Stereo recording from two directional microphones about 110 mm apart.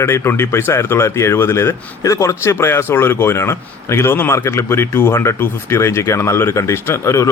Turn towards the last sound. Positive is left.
turn(degrees=25)  # may be behind; listen again after turning